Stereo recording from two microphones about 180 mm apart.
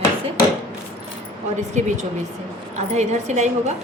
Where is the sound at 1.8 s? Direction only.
40° right (ahead or behind).